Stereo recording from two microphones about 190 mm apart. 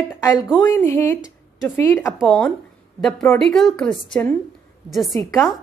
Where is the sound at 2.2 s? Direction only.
Centre (ahead or behind).